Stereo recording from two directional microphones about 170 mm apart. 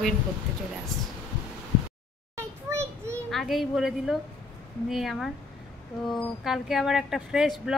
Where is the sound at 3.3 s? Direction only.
Centre (ahead or behind).